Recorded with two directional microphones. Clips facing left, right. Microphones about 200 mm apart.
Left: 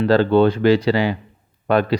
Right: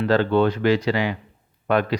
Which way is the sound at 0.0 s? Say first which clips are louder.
Left 4 dB; 30° left (ahead or behind).